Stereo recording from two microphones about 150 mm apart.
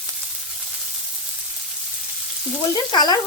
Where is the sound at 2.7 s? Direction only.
25° left (ahead or behind).